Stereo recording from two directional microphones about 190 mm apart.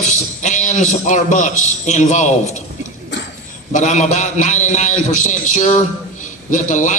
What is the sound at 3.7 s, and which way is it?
A man's voice, 40° left (ahead or behind).